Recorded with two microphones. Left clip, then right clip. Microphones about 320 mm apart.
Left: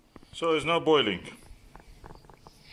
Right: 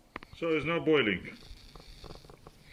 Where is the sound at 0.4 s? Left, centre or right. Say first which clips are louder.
Left 4 dB; left.